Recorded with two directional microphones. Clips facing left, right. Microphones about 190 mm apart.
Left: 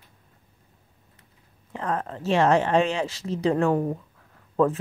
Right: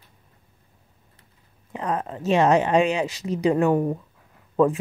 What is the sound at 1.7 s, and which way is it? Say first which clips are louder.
Speech: right 2 dB; 15° right (ahead or behind).